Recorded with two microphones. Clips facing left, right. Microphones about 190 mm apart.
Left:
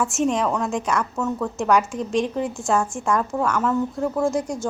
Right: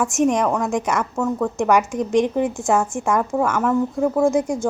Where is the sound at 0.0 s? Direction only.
15° right (ahead or behind).